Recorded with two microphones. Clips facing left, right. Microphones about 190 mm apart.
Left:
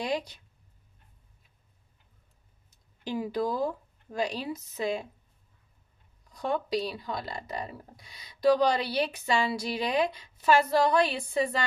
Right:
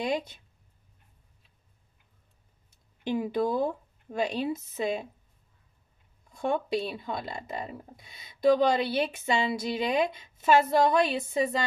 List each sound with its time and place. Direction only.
0.0 s speech: 25° right (ahead or behind)
3.0 s speech: 25° right (ahead or behind)
6.3 s speech: 25° right (ahead or behind)